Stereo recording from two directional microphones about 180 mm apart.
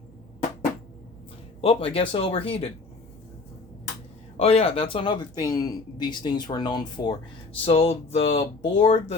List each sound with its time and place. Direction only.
1.6 s speech: 30° left (ahead or behind)
4.4 s speech: 35° left (ahead or behind)